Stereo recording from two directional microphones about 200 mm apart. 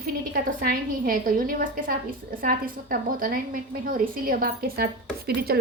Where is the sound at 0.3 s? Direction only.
45° right (ahead or behind).